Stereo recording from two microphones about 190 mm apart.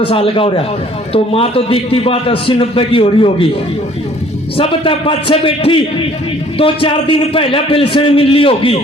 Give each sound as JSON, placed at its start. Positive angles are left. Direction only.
{"t": 0.1, "sound": "a man's voice", "side_deg": 30}
{"t": 4.5, "sound": "a man's voice", "side_deg": 30}